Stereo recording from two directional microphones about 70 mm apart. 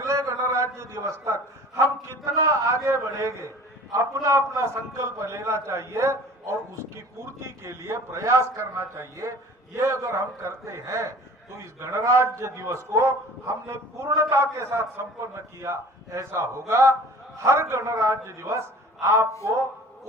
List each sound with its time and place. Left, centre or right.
0.0 s a sound: right
3.9 s a man's voice: right
14.2 s a man's voice: right